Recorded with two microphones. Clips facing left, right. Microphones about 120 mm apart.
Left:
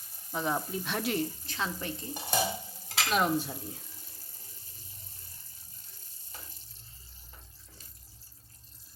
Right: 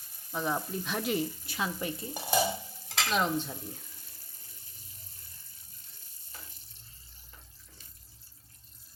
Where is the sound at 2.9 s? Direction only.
5° left (ahead or behind).